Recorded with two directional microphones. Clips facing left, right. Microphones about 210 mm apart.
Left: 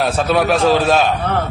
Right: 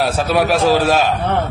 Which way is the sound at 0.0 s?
5° right (ahead or behind).